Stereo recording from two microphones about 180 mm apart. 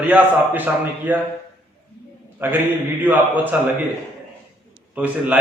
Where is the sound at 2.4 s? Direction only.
10° right (ahead or behind).